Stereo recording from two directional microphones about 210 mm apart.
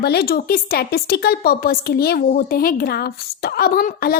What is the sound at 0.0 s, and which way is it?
A woman's voice, 50° left (ahead or behind).